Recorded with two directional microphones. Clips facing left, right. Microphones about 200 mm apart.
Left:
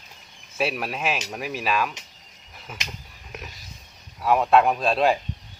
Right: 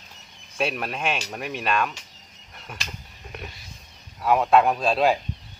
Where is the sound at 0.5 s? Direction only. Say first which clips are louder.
Even; 5° left (ahead or behind).